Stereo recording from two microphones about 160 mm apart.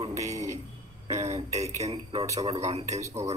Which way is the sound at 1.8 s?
35° right (ahead or behind).